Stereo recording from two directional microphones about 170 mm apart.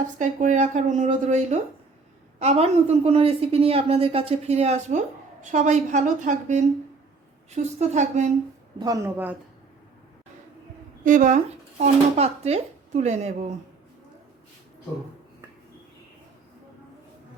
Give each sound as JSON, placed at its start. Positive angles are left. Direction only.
{"t": 0.2, "sound": "a woman's voice", "side_deg": -45}
{"t": 8.8, "sound": "speech", "side_deg": -15}
{"t": 11.0, "sound": "speech", "side_deg": -50}
{"t": 11.8, "sound": "a woman's voice", "side_deg": -40}